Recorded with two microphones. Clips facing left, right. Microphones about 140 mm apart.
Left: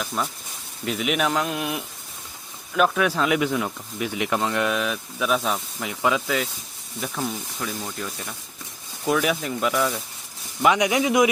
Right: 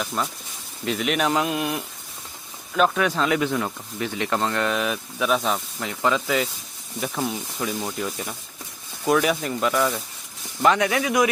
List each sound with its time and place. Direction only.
0.0 s speech: centre (ahead or behind)
10.6 s speech: 15° left (ahead or behind)